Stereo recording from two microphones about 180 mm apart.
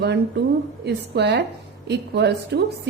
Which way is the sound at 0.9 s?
70° right (ahead or behind).